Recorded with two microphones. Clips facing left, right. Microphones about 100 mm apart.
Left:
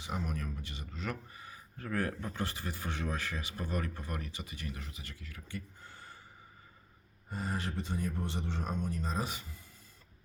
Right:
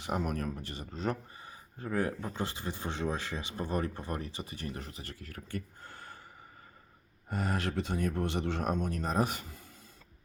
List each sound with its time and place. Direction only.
0.0 s speech: 55° right (ahead or behind)
7.3 s a man's voice: 70° right (ahead or behind); by 9.5 s 55° right (ahead or behind)